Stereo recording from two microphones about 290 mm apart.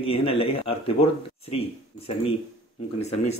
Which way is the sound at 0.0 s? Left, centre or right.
Centre.